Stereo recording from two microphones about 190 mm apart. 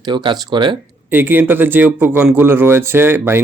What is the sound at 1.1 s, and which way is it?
A man's voice, 10° right (ahead or behind).